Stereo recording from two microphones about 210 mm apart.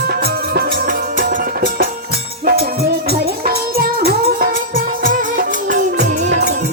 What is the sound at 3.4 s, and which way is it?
Music, 45° right (ahead or behind).